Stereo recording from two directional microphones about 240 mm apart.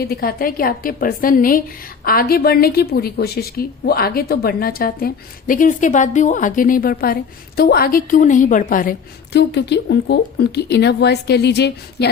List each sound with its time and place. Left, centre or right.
0.1 s a woman's voice: left